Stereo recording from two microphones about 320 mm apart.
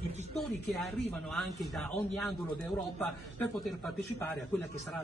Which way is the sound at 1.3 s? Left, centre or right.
Centre.